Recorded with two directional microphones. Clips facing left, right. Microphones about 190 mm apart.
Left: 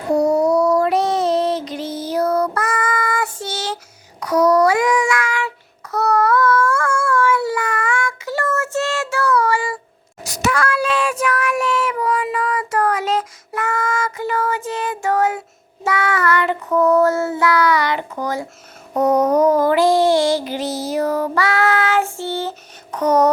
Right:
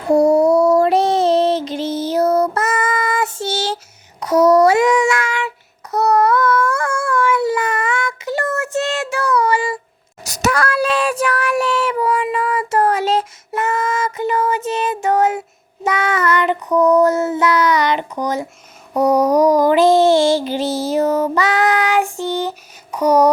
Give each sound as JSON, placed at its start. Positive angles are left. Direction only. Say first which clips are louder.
{"t": 0.2, "sound": "female singing", "louder": "right 3 dB", "side_deg": -30}
{"t": 4.2, "sound": "child singing", "louder": "right 3 dB", "side_deg": -25}
{"t": 5.9, "sound": "a sound", "louder": "right 2 dB", "side_deg": -20}
{"t": 10.2, "sound": "child singing", "louder": "right 1 dB", "side_deg": -40}